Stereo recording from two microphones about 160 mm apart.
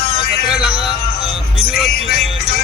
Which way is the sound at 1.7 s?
80° left.